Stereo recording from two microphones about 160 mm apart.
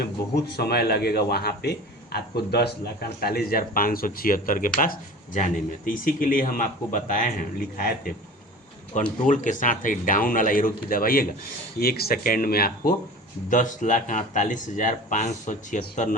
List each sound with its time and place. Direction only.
0.0 s speech: 90° left
2.1 s speech: 85° left; by 8.1 s 65° left (ahead or behind)
9.0 s speech: 55° left (ahead or behind); by 12.9 s 70° left (ahead or behind)
13.5 s speech: 55° left (ahead or behind)